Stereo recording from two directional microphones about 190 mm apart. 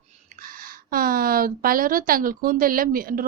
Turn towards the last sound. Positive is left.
turn(degrees=-50)  # may be behind; listen again after turning